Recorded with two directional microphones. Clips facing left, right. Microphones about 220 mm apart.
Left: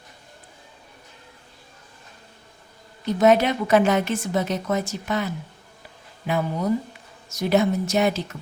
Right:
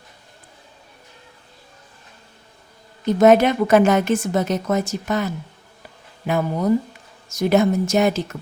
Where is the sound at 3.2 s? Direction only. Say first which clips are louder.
Right 4 dB; 50° right (ahead or behind).